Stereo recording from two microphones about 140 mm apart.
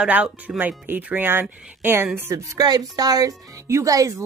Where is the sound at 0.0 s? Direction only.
10° right (ahead or behind).